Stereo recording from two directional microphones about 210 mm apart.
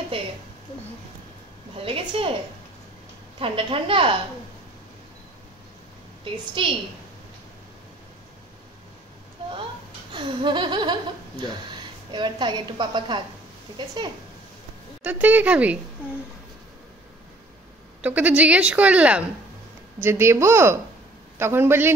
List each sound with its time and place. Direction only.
1.8 s speech: 25° right (ahead or behind)
3.3 s speech: 25° right (ahead or behind)
10.1 s speech: 20° right (ahead or behind)
15.0 s speech: 10° right (ahead or behind)
18.0 s speech: 5° right (ahead or behind)